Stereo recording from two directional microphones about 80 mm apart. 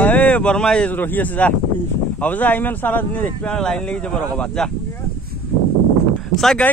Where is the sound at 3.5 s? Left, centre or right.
Centre.